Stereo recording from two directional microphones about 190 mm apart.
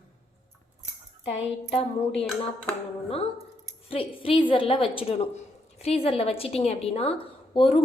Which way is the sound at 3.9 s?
30° left (ahead or behind).